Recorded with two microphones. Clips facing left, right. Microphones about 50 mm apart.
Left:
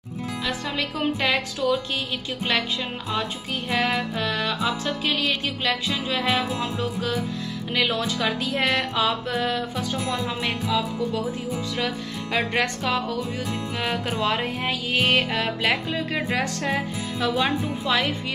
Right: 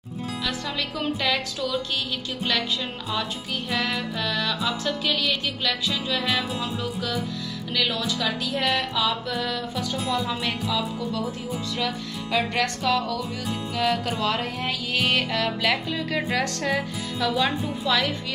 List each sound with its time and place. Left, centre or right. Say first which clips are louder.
0.5 s music: left 3 dB; left
3.7 s music: left 4 dB; left
12.3 s music: even; left
17.2 s music: left 1 dB; left